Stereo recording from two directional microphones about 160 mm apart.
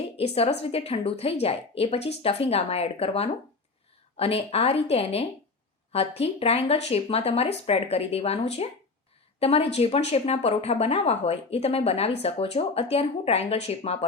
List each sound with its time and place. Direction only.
0.2 s speech: 40° left (ahead or behind)